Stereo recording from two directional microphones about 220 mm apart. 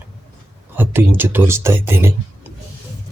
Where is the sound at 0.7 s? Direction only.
10° right (ahead or behind).